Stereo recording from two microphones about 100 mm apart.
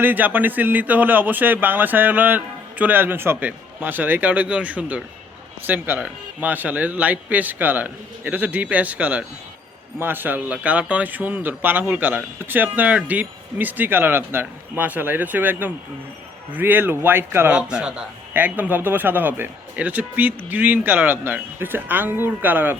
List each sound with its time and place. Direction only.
0.0 s speech: 20° right (ahead or behind)
17.5 s speech: 10° right (ahead or behind)